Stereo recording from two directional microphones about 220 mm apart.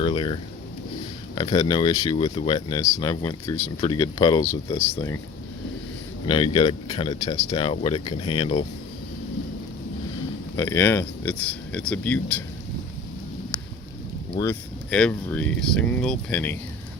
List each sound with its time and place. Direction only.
0.0 s a sound: 25° left (ahead or behind)
1.4 s speech: 20° left (ahead or behind)
6.2 s speech: 20° left (ahead or behind)
10.6 s speech: 10° left (ahead or behind)
14.4 s speech: 20° left (ahead or behind)
14.8 s speech: 5° left (ahead or behind)